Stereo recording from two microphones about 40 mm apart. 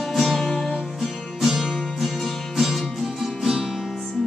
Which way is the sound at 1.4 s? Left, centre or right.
Centre.